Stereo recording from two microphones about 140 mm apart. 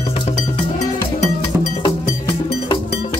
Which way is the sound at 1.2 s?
55° left (ahead or behind).